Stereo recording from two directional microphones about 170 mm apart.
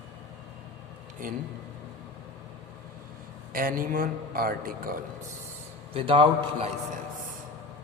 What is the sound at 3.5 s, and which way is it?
A man's voice, 55° right (ahead or behind).